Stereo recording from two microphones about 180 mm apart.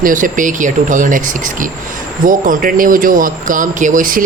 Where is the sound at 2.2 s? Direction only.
50° right (ahead or behind).